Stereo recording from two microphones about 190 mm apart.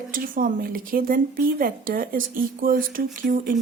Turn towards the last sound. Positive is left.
turn(degrees=-45)  # may be behind; listen again after turning